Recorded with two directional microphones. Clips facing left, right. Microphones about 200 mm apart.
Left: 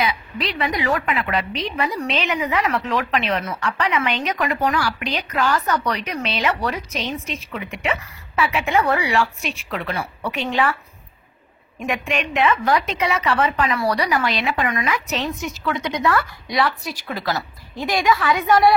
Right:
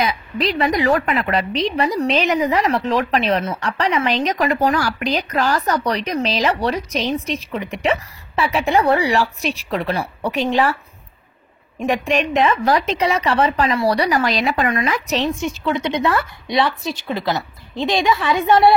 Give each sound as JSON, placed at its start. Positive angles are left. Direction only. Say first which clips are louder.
{"t": 0.0, "sound": "a woman's voice", "louder": "right 3 dB", "side_deg": -40}
{"t": 11.8, "sound": "a woman's voice", "louder": "right 5 dB", "side_deg": -35}